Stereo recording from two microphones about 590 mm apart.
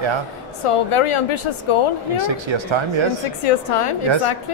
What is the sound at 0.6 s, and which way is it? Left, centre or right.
Speech, left.